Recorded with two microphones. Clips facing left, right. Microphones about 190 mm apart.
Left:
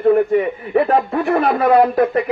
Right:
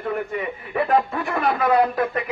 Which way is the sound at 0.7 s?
35° left (ahead or behind).